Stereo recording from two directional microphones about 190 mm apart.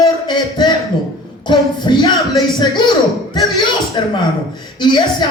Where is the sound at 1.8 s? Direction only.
25° left (ahead or behind).